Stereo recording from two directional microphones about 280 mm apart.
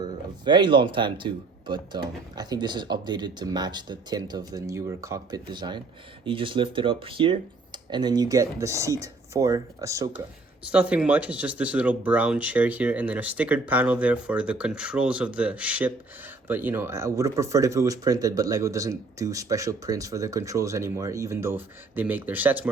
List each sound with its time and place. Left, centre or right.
0.0 s speech: centre